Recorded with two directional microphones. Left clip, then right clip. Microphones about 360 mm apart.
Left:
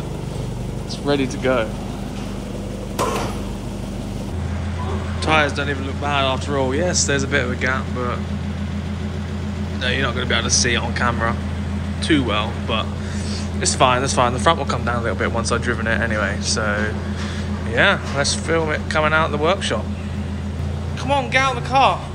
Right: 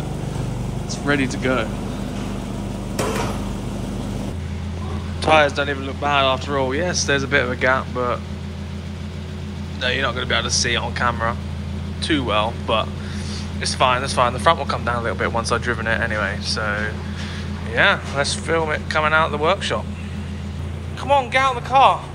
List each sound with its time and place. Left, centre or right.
1.4 s speech: centre
5.2 s speech: centre
9.8 s speech: centre
21.1 s speech: centre